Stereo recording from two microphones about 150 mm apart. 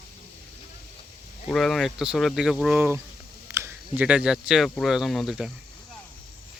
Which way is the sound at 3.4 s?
15° right (ahead or behind).